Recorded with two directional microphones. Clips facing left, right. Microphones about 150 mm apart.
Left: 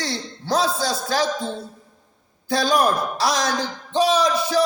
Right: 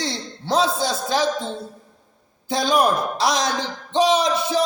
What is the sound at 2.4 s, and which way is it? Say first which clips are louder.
A man's voice: even; 20° right (ahead or behind).